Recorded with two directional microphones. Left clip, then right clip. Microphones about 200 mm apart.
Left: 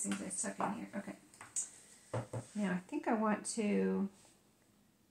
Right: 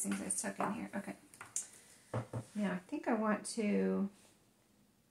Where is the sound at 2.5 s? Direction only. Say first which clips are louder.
Even; 20° left (ahead or behind).